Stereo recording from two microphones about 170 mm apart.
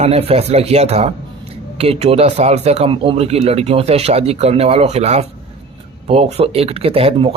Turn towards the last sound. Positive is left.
turn(degrees=-35)  # may be behind; listen again after turning